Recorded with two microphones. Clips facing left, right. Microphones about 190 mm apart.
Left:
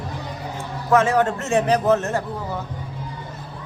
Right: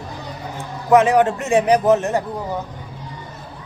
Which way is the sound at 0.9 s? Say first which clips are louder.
Right 4 dB; 15° right (ahead or behind).